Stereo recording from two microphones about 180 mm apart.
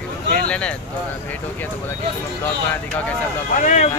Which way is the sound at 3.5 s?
45° left (ahead or behind).